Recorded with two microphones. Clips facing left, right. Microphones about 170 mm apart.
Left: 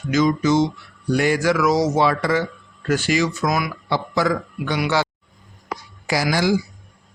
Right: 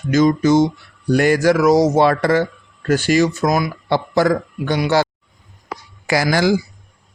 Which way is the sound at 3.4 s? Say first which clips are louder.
Right 4 dB; 30° right (ahead or behind).